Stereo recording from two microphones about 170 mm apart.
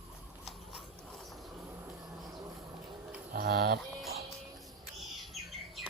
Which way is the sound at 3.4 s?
70° right (ahead or behind).